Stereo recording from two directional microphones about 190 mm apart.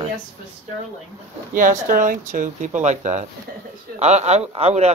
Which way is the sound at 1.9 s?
45° right (ahead or behind).